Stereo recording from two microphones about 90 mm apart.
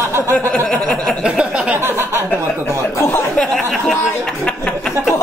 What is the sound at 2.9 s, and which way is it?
Speech, 30° left (ahead or behind).